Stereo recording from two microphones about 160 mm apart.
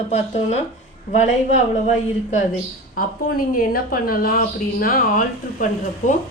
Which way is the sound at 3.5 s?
65° left (ahead or behind).